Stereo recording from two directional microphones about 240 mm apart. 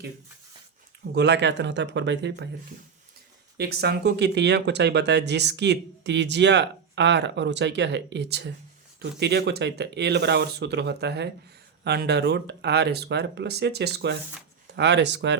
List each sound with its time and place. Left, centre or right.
1.1 s speech: right
3.6 s speech: right